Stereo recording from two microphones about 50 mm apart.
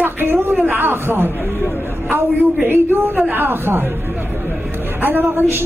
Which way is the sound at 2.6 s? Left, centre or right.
Right.